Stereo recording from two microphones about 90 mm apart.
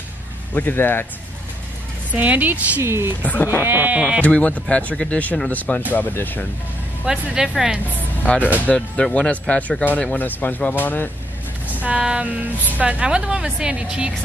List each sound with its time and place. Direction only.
0.6 s speech: 20° left (ahead or behind)
2.1 s a woman's voice: 20° right (ahead or behind)
2.8 s speech: 30° right (ahead or behind)
4.2 s speech: 15° left (ahead or behind)
7.1 s a woman's voice: 5° right (ahead or behind)
8.0 s speech: 20° left (ahead or behind)
11.8 s a woman's voice: 10° right (ahead or behind)